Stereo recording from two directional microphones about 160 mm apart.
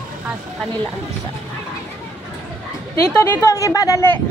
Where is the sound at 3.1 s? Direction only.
15° left (ahead or behind).